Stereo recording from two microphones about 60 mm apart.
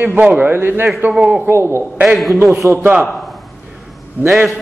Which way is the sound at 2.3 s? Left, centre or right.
Right.